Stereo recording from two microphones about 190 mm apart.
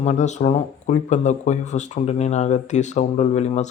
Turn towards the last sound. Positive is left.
turn(degrees=35)  # may be behind; listen again after turning